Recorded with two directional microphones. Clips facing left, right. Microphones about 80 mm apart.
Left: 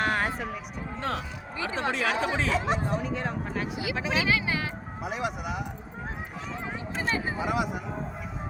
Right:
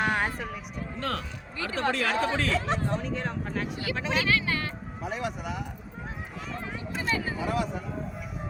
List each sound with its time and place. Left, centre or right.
0.0 s a sound: centre
0.9 s speech: centre
7.0 s speech: left; by 7.9 s centre